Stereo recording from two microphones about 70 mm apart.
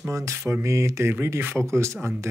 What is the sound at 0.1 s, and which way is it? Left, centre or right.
Speech, right.